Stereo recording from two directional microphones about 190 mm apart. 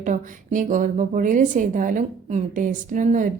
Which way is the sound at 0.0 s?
45° right (ahead or behind).